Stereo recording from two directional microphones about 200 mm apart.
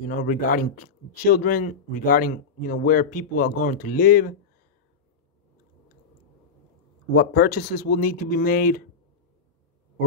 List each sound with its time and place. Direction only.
0.0 s speech: 40° left (ahead or behind)
7.2 s speech: 45° left (ahead or behind)